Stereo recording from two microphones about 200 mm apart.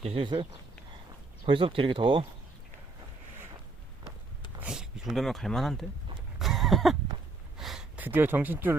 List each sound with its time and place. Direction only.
0.0 s speech: 25° right (ahead or behind)
1.5 s speech: 25° right (ahead or behind)
4.6 s speech: 5° right (ahead or behind)
6.4 s a sound: centre (ahead or behind)